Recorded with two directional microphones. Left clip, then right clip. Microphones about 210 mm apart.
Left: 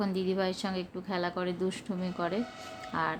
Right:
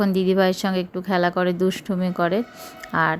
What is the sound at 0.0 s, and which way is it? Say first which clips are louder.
Speech: right 12 dB; 35° right (ahead or behind).